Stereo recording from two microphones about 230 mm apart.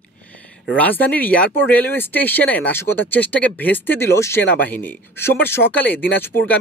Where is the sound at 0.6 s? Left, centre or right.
Centre.